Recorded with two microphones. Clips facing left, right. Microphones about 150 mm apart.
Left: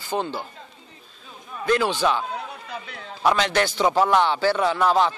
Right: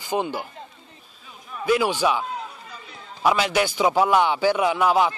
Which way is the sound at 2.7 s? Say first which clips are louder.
Left 6 dB; 70° left (ahead or behind).